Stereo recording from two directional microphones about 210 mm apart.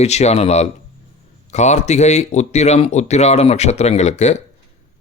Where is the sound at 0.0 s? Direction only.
30° left (ahead or behind).